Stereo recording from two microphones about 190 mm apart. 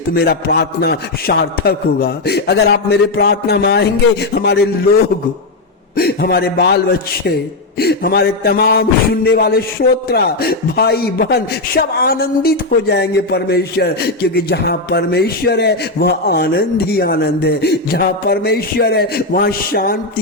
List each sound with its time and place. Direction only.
0.2 s speech: 55° left (ahead or behind)
6.0 s speech: 55° left (ahead or behind)